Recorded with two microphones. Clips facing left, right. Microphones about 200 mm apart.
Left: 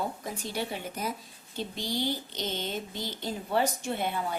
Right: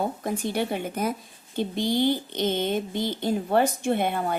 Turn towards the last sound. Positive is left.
turn(degrees=-60)  # may be behind; listen again after turning